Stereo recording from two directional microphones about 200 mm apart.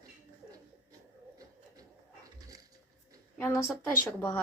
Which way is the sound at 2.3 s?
15° right (ahead or behind).